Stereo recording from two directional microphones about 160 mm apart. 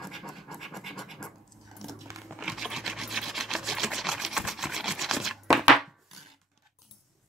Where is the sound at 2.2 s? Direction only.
Centre (ahead or behind).